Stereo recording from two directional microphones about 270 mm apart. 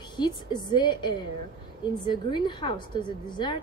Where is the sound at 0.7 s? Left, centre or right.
Centre.